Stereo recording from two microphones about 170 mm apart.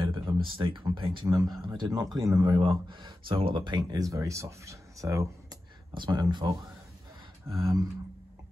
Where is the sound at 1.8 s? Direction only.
25° right (ahead or behind).